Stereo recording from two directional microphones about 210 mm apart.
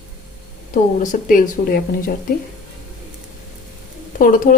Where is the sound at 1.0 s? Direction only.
40° left (ahead or behind).